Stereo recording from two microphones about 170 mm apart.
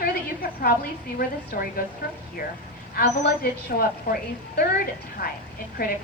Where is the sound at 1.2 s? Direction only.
60° left (ahead or behind).